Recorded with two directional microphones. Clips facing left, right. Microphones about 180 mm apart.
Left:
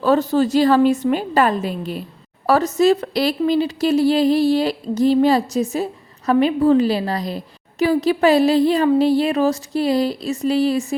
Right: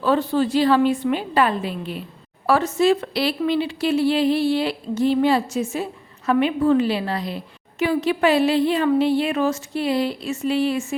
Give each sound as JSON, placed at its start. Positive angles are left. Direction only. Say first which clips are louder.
{"t": 0.0, "sound": "a woman's voice", "louder": "left 3 dB", "side_deg": 40}